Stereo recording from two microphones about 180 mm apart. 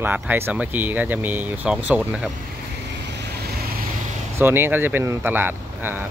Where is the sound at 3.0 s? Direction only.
65° right (ahead or behind).